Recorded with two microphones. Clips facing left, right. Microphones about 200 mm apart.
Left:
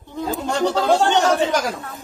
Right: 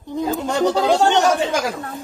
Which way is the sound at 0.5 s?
20° right (ahead or behind).